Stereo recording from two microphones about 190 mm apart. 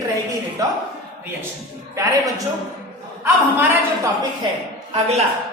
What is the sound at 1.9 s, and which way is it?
Speech, 15° right (ahead or behind).